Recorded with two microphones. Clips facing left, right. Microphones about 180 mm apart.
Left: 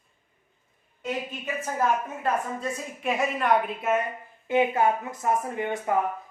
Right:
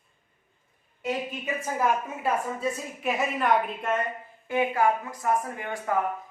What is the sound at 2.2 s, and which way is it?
A woman's voice, 5° right (ahead or behind).